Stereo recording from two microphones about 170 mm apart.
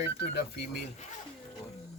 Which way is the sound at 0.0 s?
80° left.